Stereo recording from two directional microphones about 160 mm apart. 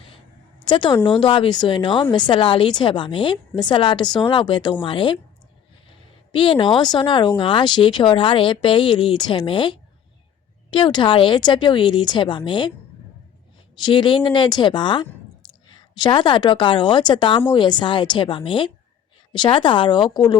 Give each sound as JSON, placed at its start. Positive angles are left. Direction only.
{"t": 0.6, "sound": "a woman's voice", "side_deg": 30}
{"t": 13.7, "sound": "a woman's voice", "side_deg": 30}